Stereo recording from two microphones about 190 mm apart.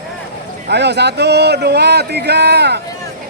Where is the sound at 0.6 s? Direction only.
65° right (ahead or behind).